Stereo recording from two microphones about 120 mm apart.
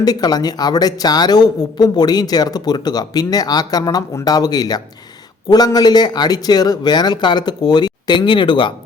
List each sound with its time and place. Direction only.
0.0 s a man's voice: 35° left (ahead or behind)